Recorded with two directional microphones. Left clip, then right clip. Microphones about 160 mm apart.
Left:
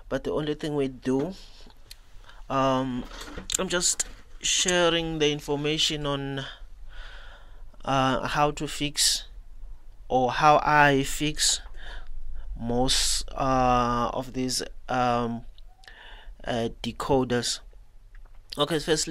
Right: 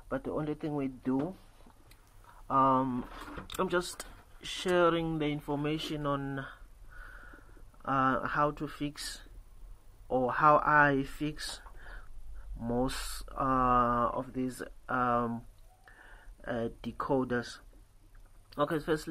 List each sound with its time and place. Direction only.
0.1 s speech: 15° left (ahead or behind)
2.4 s speech: 15° left (ahead or behind)